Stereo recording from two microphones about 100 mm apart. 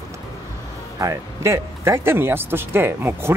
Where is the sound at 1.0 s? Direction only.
30° right (ahead or behind).